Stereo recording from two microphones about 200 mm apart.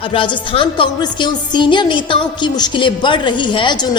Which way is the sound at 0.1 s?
25° left (ahead or behind).